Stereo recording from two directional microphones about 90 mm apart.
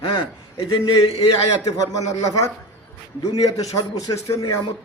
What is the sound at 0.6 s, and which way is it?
Speech, 70° left (ahead or behind).